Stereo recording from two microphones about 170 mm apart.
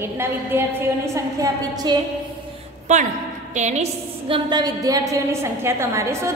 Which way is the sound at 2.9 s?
45° right (ahead or behind).